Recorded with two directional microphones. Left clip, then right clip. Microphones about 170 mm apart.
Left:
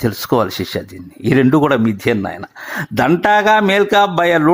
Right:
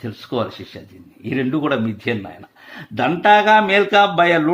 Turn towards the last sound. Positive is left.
turn(degrees=40)  # may be behind; listen again after turning